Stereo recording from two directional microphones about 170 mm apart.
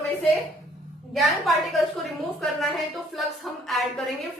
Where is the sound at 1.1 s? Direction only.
Centre (ahead or behind).